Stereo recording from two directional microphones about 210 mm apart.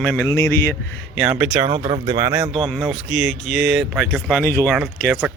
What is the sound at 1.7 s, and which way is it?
Speech, 25° right (ahead or behind).